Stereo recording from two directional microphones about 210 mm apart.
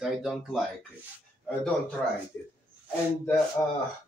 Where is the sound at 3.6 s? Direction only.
15° left (ahead or behind).